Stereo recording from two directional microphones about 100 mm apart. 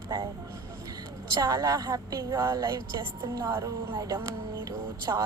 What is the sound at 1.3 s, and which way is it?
Speech, 40° right (ahead or behind).